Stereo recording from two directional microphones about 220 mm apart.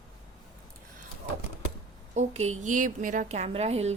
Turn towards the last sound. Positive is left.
turn(degrees=-30)  # may be behind; listen again after turning